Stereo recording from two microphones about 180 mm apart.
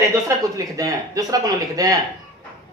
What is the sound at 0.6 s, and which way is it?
Speech, 20° right (ahead or behind).